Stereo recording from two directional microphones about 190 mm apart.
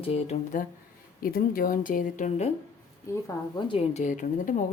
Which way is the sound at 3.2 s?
25° left (ahead or behind).